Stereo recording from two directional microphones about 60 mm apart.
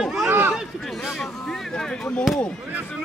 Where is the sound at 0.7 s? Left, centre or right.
Centre.